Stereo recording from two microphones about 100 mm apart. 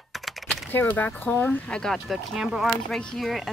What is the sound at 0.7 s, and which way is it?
Speech, 20° left (ahead or behind).